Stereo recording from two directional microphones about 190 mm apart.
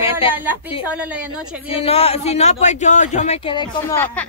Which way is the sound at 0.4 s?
10° right (ahead or behind).